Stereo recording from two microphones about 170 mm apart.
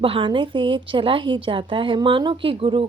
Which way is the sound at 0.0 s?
30° right (ahead or behind).